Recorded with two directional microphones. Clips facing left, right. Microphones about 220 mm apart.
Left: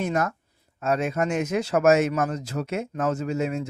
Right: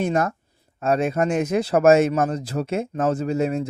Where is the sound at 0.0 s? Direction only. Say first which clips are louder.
Right 3 dB; 30° right (ahead or behind).